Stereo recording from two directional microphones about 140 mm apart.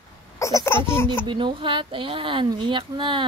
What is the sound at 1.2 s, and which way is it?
Speech, 35° right (ahead or behind).